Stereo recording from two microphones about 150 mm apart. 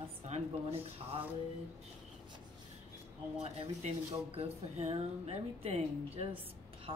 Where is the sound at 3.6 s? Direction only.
45° right (ahead or behind).